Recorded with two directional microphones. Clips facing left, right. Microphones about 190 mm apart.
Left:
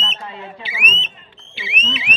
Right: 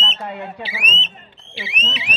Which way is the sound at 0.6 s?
35° right (ahead or behind).